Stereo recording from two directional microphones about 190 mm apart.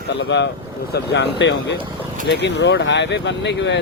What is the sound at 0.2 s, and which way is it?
Speech, 70° left (ahead or behind).